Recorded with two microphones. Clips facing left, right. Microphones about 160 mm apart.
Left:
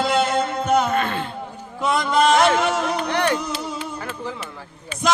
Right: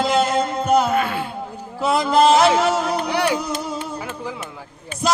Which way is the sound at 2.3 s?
5° right (ahead or behind).